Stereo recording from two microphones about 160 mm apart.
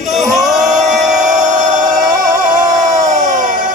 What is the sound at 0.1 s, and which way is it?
Singing, centre (ahead or behind).